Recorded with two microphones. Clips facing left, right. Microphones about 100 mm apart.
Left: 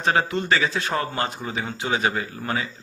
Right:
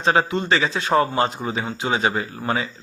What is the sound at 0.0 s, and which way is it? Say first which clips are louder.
A man's voice: right 3 dB; 25° right (ahead or behind).